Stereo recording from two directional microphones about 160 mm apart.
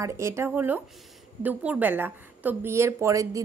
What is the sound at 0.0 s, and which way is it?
A woman's voice, 20° right (ahead or behind).